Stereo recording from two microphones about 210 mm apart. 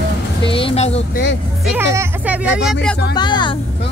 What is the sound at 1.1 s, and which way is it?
Speech, 55° left (ahead or behind).